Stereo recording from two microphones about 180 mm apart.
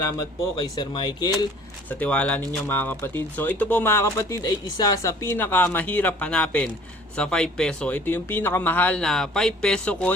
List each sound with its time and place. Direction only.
0.2 s speech: 25° left (ahead or behind)
1.9 s speech: 5° left (ahead or behind)